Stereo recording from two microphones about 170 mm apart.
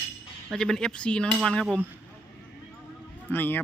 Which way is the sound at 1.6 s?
5° right (ahead or behind).